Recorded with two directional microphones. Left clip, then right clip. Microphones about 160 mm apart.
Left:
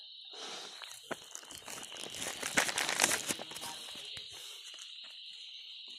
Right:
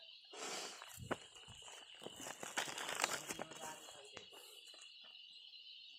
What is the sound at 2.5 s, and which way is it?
Crumpling, 60° left (ahead or behind).